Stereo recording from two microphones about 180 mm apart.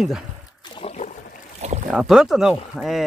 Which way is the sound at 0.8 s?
35° left (ahead or behind).